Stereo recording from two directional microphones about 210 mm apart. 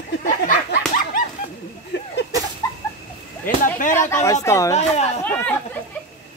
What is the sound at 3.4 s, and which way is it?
Speech, 40° left (ahead or behind).